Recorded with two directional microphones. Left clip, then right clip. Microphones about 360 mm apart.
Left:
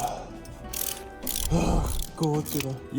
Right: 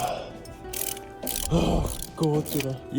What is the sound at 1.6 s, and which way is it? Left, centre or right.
Speech, centre.